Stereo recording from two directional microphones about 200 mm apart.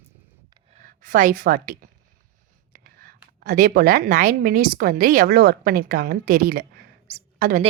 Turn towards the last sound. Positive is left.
turn(degrees=-40)  # may be behind; listen again after turning